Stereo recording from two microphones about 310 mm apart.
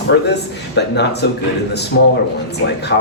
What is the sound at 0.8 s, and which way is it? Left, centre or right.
A man's voice, left.